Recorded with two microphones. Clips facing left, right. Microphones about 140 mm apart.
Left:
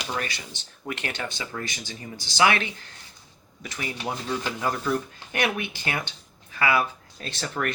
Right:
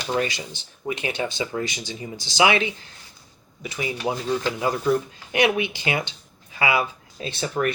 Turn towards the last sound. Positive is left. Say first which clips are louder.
# right 5 dB
turn(degrees=-10)  # may be behind; listen again after turning